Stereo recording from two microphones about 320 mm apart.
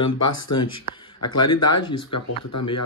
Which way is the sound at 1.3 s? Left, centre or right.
Left.